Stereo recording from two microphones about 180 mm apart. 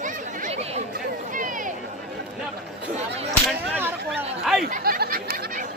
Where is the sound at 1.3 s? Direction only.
45° right (ahead or behind).